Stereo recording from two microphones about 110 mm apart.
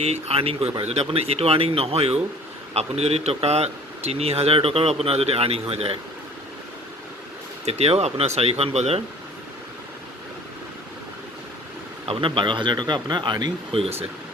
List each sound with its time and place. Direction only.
0.0 s a man's voice: 65° right (ahead or behind)
7.6 s a man's voice: 70° right (ahead or behind)
12.1 s speech: 50° right (ahead or behind)
13.7 s speech: 65° right (ahead or behind)